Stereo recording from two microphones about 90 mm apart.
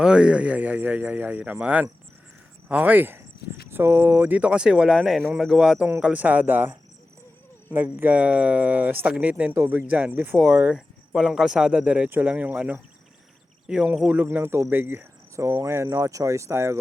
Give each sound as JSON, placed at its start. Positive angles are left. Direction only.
{"t": 0.0, "sound": "speech", "side_deg": -10}
{"t": 9.4, "sound": "speech", "side_deg": -25}
{"t": 10.8, "sound": "speech", "side_deg": -5}